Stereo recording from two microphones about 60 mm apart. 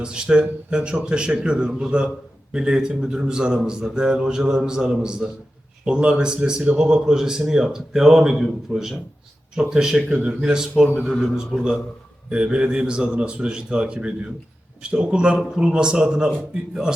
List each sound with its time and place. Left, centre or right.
0.0 s speech: centre